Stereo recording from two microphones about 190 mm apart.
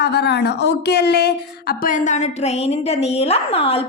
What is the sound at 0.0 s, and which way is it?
A woman's voice, 60° left (ahead or behind).